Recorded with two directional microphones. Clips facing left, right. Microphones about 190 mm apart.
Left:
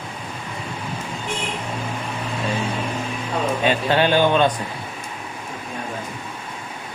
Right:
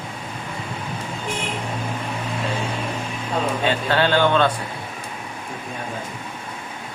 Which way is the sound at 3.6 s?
15° left (ahead or behind).